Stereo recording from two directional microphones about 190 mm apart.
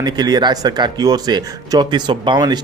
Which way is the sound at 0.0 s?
20° right (ahead or behind).